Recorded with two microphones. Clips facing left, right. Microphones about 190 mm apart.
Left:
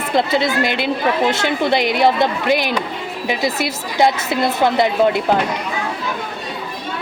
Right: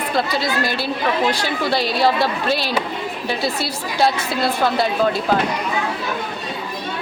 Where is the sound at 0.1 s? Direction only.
20° left (ahead or behind).